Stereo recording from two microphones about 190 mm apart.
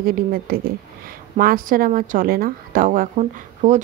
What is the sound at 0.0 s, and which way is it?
A woman's voice, 50° right (ahead or behind).